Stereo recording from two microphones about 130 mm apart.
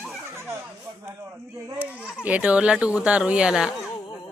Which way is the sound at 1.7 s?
10° right (ahead or behind).